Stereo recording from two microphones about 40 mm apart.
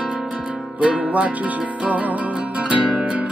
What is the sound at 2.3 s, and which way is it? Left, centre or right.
Music, right.